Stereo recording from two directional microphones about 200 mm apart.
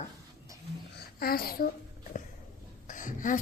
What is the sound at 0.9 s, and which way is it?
Babbling, 50° left (ahead or behind).